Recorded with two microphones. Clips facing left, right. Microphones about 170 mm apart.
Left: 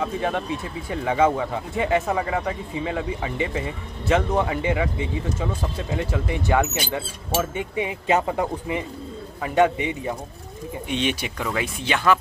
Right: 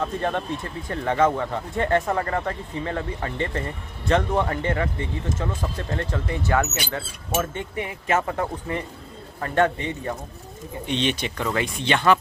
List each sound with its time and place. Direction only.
0.0 s speech: 5° left (ahead or behind)